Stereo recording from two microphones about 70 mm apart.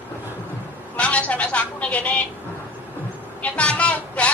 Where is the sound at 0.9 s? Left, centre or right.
Centre.